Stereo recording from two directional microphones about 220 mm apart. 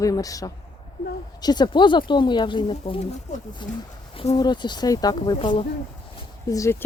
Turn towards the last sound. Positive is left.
turn(degrees=15)  # may be behind; listen again after turning